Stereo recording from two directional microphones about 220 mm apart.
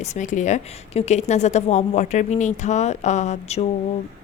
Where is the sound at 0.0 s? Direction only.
35° left (ahead or behind).